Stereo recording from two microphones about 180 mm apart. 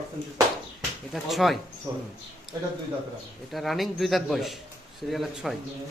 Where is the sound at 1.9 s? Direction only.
15° right (ahead or behind).